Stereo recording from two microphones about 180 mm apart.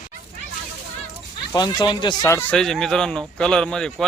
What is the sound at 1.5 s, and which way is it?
Speech, 25° left (ahead or behind).